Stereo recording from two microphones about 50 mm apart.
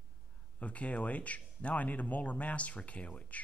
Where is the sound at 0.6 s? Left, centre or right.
Left.